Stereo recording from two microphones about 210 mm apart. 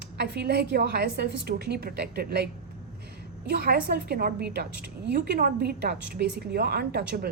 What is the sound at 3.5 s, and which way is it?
A woman's voice, 45° right (ahead or behind).